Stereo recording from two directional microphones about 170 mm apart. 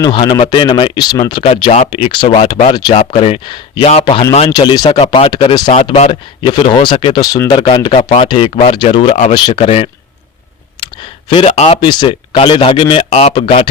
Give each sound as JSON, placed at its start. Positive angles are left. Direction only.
{"t": 0.0, "sound": "speech", "side_deg": 25}
{"t": 7.5, "sound": "speech", "side_deg": 35}
{"t": 10.8, "sound": "clicking", "side_deg": 25}
{"t": 11.3, "sound": "speech", "side_deg": 35}